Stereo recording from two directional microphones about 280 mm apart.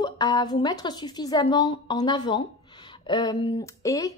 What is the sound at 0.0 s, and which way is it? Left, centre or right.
A woman's voice, centre.